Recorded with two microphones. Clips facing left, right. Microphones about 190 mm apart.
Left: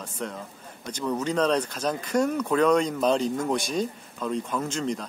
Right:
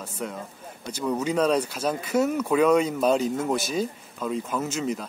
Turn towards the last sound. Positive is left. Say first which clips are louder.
# right 1 dB
turn(degrees=-5)  # may be behind; listen again after turning